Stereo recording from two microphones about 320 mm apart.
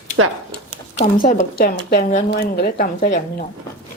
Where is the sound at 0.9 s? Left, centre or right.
Left.